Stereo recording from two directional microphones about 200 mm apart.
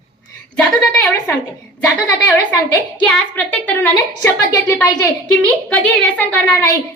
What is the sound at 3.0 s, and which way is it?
A woman's voice, 5° left (ahead or behind).